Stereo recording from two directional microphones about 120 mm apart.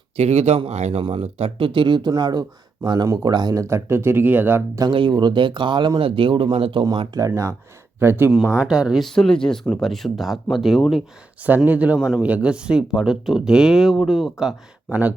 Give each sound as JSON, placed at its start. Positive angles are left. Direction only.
{"t": 0.2, "sound": "speech", "side_deg": -60}
{"t": 1.0, "sound": "speech", "side_deg": -50}
{"t": 4.8, "sound": "speech", "side_deg": -45}
{"t": 7.1, "sound": "speech", "side_deg": -25}
{"t": 8.5, "sound": "speech", "side_deg": -5}
{"t": 11.4, "sound": "speech", "side_deg": -15}